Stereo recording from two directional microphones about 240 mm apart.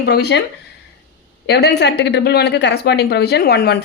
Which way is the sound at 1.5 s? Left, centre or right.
Left.